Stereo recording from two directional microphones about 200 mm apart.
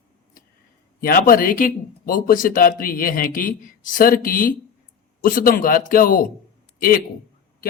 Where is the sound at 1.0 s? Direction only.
45° left (ahead or behind).